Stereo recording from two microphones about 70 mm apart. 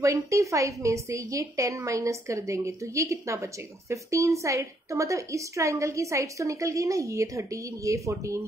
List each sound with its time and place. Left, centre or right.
0.0 s a woman's voice: right